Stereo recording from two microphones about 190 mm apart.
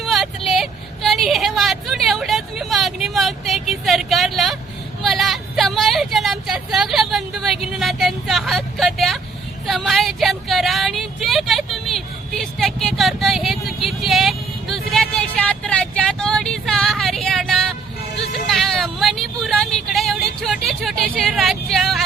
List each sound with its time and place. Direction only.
0.0 s a woman's voice: centre (ahead or behind)
9.6 s vehicle: centre (ahead or behind)